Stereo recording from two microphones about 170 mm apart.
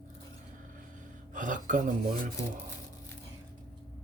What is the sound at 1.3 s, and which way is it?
Speech, 50° right (ahead or behind).